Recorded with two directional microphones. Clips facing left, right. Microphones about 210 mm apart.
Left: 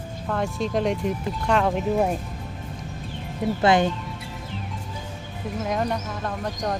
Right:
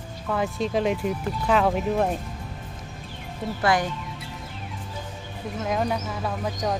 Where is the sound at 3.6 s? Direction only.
25° left (ahead or behind).